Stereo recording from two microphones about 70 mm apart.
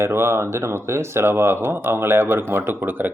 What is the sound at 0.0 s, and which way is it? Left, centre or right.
Speech, right.